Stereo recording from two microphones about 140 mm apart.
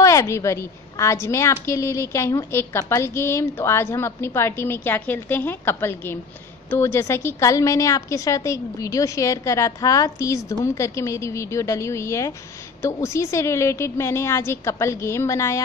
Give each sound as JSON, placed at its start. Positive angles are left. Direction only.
{"t": 0.0, "sound": "a woman's voice", "side_deg": 20}